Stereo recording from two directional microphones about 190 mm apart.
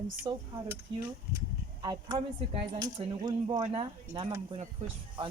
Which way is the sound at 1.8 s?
25° right (ahead or behind).